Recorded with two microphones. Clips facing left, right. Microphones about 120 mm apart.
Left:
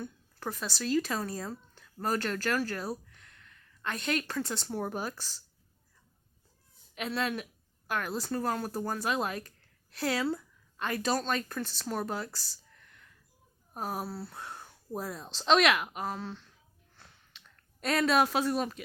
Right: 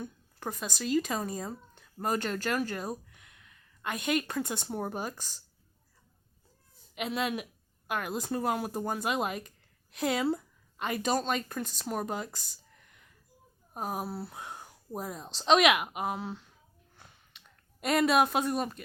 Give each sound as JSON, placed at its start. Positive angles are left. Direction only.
{"t": 0.0, "sound": "a woman's voice", "side_deg": -10}
{"t": 3.1, "sound": "a sound", "side_deg": -10}
{"t": 4.6, "sound": "a woman's voice", "side_deg": -10}
{"t": 6.9, "sound": "a woman's voice", "side_deg": -10}
{"t": 13.7, "sound": "a woman's voice", "side_deg": -5}
{"t": 14.1, "sound": "speech", "side_deg": -20}
{"t": 14.3, "sound": "a sound", "side_deg": -10}
{"t": 15.1, "sound": "a woman's voice", "side_deg": -5}
{"t": 17.0, "sound": "a sound", "side_deg": -10}